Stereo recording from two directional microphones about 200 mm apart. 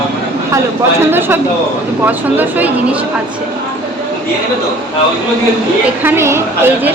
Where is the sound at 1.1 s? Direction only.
10° right (ahead or behind).